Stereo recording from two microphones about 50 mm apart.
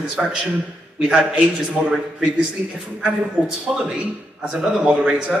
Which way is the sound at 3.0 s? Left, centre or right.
Centre.